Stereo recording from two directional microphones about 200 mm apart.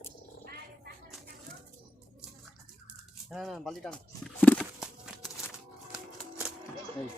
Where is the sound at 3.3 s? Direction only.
Centre (ahead or behind).